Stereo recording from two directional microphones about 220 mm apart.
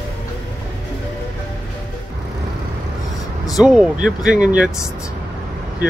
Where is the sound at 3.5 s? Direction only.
5° right (ahead or behind).